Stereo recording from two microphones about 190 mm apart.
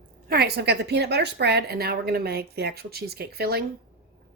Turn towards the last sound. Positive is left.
turn(degrees=-55)  # may be behind; listen again after turning